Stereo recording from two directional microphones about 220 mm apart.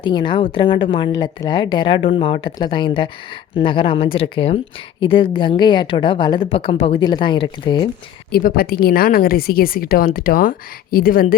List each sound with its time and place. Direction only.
0.0 s a woman's voice: 20° left (ahead or behind)
8.3 s a woman's voice: 40° left (ahead or behind)